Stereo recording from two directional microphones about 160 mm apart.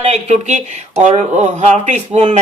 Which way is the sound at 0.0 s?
40° right (ahead or behind).